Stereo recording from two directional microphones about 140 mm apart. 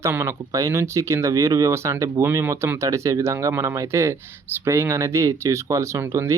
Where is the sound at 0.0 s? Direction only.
20° right (ahead or behind).